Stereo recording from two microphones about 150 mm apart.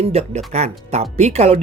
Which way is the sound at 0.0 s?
45° right (ahead or behind).